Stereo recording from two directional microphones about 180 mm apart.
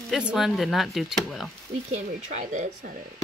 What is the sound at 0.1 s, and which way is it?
Speech, 5° right (ahead or behind).